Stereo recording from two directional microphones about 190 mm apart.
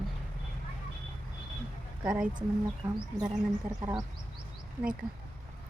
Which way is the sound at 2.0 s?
5° right (ahead or behind).